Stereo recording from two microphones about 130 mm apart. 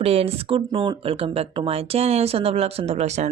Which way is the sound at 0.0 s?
50° right (ahead or behind).